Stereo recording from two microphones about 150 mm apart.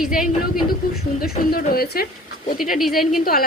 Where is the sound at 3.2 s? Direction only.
80° left.